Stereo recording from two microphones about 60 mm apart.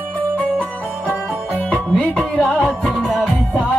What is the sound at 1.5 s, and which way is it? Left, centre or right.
Music, left.